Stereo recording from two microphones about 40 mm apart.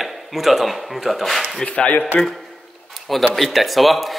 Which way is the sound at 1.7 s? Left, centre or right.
Left.